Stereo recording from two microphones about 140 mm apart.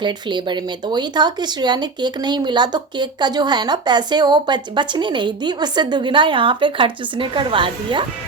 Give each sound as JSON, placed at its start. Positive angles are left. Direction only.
{"t": 0.0, "sound": "speech", "side_deg": -35}